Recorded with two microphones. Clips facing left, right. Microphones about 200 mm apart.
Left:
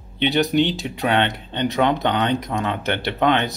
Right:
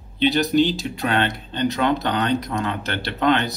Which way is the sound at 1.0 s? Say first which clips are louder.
Left 3 dB; 20° left (ahead or behind).